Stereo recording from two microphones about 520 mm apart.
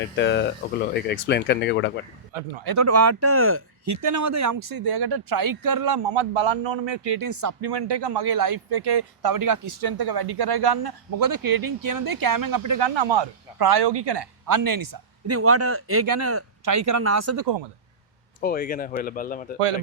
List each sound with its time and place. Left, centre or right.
0.2 s speech: centre
2.3 s speech: right
2.6 s speech: right
3.9 s a man's voice: right
6.1 s a man's voice: right
7.3 s a man's voice: right
7.7 s a man's voice: right
12.8 s speech: right
14.5 s a man's voice: right
15.3 s speech: right
18.3 s speech: centre
19.5 s speech: right